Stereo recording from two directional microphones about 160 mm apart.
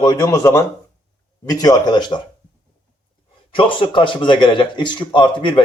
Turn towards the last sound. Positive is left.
turn(degrees=30)  # may be behind; listen again after turning